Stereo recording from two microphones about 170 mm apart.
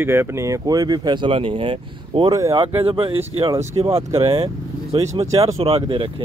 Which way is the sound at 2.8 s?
30° right (ahead or behind).